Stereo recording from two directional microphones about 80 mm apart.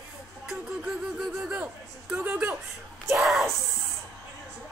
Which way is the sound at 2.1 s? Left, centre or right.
Centre.